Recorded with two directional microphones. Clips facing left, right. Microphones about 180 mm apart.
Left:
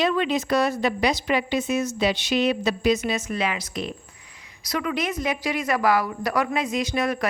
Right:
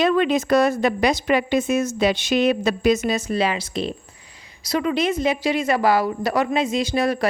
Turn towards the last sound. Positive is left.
turn(degrees=-30)  # may be behind; listen again after turning